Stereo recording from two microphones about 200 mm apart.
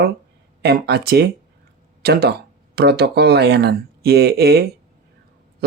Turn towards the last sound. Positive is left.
turn(degrees=-50)  # may be behind; listen again after turning